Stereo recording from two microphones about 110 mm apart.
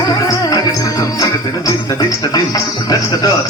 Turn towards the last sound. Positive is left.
turn(degrees=35)  # may be behind; listen again after turning